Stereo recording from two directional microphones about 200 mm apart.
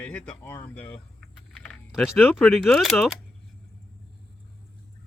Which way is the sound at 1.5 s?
5° left (ahead or behind).